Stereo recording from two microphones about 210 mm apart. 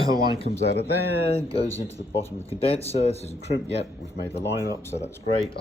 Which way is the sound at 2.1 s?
30° left (ahead or behind).